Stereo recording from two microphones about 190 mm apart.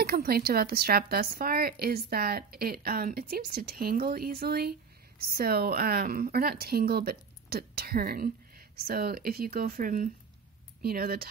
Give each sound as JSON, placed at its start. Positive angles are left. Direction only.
{"t": 0.0, "sound": "a woman's voice", "side_deg": -50}